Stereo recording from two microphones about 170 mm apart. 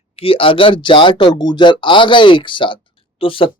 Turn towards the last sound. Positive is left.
turn(degrees=30)  # may be behind; listen again after turning